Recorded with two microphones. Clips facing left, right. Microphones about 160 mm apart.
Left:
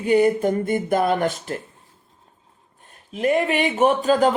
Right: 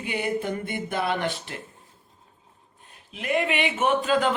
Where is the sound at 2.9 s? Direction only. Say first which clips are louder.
Left 7 dB; 40° left (ahead or behind).